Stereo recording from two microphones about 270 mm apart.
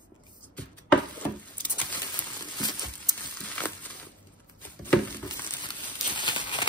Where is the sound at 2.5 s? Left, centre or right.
Centre.